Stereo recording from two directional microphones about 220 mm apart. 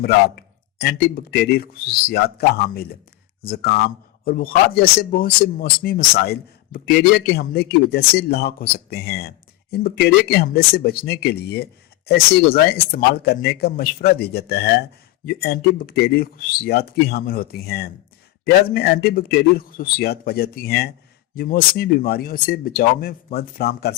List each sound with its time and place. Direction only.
0.0 s speech: 45° left (ahead or behind)